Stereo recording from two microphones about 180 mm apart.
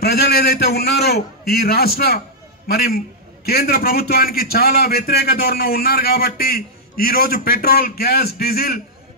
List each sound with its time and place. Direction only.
0.0 s a man's voice: 60° left (ahead or behind)